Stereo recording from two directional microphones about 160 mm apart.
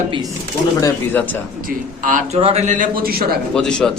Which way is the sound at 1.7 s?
55° right (ahead or behind).